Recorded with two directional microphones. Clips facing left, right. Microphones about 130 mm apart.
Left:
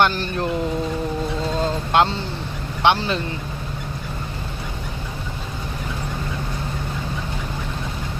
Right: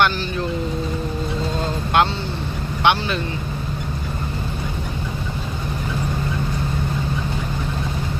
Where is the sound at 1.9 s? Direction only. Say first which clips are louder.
Even; 25° left (ahead or behind).